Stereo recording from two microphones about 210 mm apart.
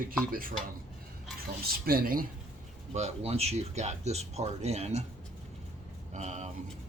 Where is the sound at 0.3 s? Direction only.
40° right (ahead or behind).